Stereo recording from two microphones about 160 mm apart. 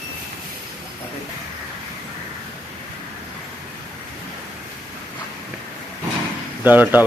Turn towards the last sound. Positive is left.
turn(degrees=-10)  # may be behind; listen again after turning